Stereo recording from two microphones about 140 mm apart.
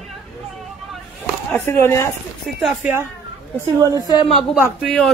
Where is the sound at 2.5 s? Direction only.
5° right (ahead or behind).